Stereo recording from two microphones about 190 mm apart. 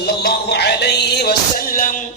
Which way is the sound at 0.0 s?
55° left (ahead or behind).